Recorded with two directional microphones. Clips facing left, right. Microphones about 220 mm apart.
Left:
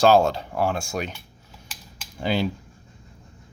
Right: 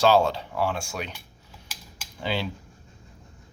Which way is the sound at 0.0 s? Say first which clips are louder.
Left 3 dB; 45° left (ahead or behind).